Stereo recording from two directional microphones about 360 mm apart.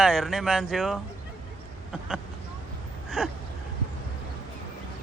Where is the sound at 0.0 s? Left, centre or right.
Centre.